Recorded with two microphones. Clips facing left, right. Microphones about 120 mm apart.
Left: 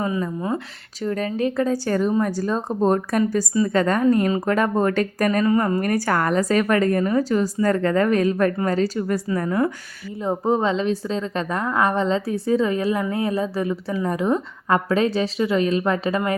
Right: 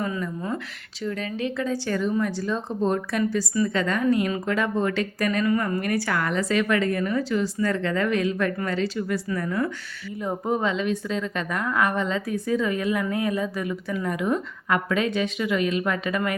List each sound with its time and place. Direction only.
1.0 s a woman's voice: 45° left (ahead or behind)
10.2 s a woman's voice: 30° left (ahead or behind)